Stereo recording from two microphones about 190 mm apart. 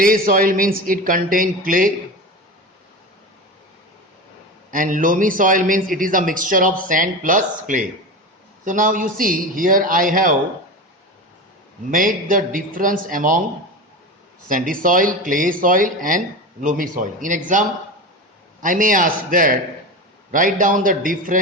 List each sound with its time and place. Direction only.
0.0 s a man's voice: 45° right (ahead or behind)
4.7 s a man's voice: 45° right (ahead or behind)
11.9 s a man's voice: 45° right (ahead or behind)
14.4 s a man's voice: 45° right (ahead or behind)